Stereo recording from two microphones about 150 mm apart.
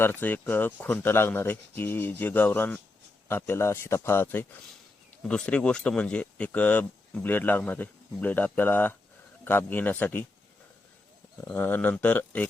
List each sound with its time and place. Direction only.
0.0 s speech: 15° left (ahead or behind)
11.3 s speech: 10° left (ahead or behind)